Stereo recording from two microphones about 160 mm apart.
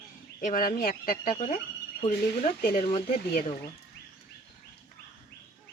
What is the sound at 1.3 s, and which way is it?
Speech, 45° left (ahead or behind).